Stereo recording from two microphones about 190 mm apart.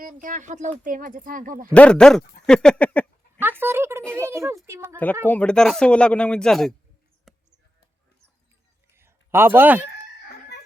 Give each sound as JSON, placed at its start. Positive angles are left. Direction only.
{"t": 0.0, "sound": "speech", "side_deg": -45}
{"t": 1.7, "sound": "speech", "side_deg": 5}
{"t": 3.4, "sound": "a child's voice", "side_deg": -10}
{"t": 5.3, "sound": "speech", "side_deg": 5}
{"t": 7.3, "sound": "basketball bounce", "side_deg": 0}
{"t": 9.0, "sound": "a sound", "side_deg": -10}